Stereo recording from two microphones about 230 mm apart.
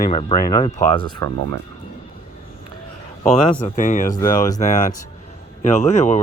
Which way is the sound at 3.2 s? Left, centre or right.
Left.